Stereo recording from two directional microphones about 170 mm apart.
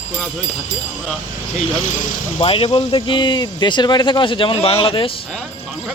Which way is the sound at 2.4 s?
30° left (ahead or behind).